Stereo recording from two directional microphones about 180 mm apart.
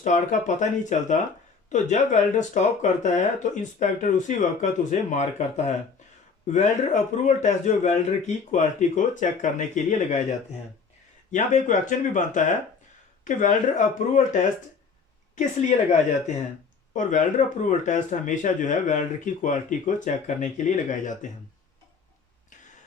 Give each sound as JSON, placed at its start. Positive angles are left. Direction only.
{"t": 0.0, "sound": "a man's voice", "side_deg": 45}
{"t": 15.4, "sound": "a man's voice", "side_deg": 40}